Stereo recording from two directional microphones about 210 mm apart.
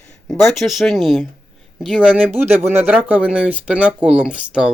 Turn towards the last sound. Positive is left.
turn(degrees=-5)  # may be behind; listen again after turning